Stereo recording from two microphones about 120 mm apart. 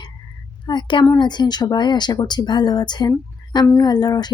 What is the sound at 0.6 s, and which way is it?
A woman's voice, 40° left (ahead or behind).